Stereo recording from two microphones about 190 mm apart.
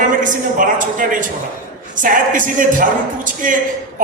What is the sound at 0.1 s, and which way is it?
A woman's voice, 45° right (ahead or behind).